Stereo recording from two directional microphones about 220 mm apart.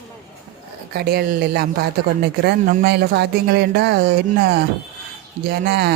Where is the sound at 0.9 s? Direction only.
45° right (ahead or behind).